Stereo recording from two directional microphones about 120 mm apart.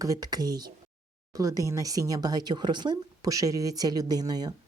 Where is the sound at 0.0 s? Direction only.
30° right (ahead or behind).